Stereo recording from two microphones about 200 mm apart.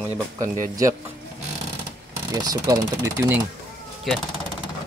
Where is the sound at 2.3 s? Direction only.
15° right (ahead or behind).